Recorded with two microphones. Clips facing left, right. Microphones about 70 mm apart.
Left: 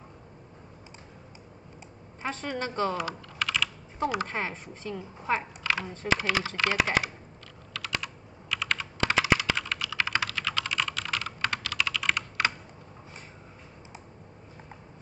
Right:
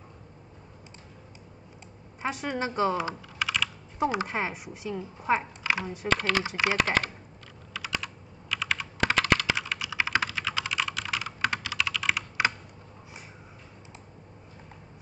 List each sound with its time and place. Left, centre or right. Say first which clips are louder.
2.2 s speech: right 2 dB; centre
3.3 s computer keyboard: even; centre
4.3 s speech: right 2 dB; centre
6.0 s speech: right 1 dB; centre
6.4 s speech: right 1 dB; centre
6.8 s speech: left 1 dB; centre
8.0 s computer keyboard: even; centre
9.1 s computer keyboard: even; centre
9.5 s computer keyboard: even; centre